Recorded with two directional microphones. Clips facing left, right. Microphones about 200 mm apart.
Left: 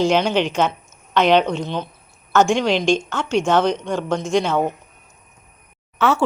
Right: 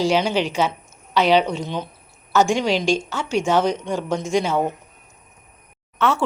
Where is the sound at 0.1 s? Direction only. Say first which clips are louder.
Left 2 dB; 5° right (ahead or behind).